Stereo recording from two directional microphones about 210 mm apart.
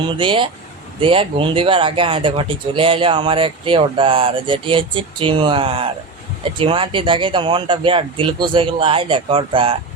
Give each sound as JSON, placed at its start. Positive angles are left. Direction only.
{"t": 0.2, "sound": "speech", "side_deg": -25}